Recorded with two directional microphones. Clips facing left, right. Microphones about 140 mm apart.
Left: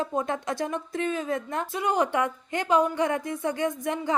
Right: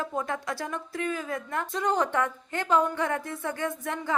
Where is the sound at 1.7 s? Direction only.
10° left (ahead or behind).